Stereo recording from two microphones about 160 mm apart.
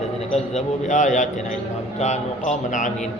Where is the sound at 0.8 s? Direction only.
50° left (ahead or behind).